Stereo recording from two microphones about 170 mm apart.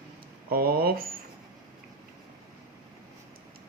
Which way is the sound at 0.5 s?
60° right (ahead or behind).